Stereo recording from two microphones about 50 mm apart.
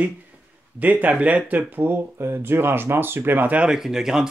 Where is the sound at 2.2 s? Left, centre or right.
Right.